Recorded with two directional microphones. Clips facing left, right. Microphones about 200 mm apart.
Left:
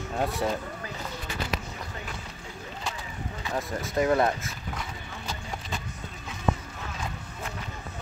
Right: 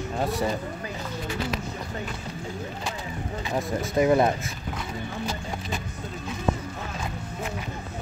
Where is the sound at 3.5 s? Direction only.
15° right (ahead or behind).